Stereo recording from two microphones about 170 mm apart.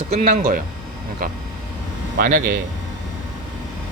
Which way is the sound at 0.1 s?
40° right (ahead or behind).